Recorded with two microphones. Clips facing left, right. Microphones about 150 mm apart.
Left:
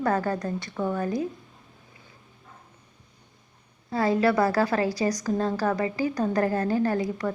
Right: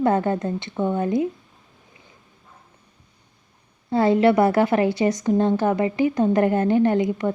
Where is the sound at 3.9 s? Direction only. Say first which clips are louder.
Right 6 dB; 25° right (ahead or behind).